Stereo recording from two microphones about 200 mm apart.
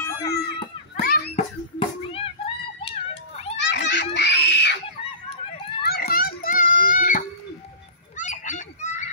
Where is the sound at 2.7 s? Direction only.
30° left (ahead or behind).